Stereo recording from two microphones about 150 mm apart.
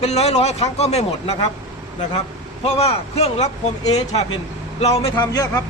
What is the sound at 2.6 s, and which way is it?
Speech, 45° left (ahead or behind).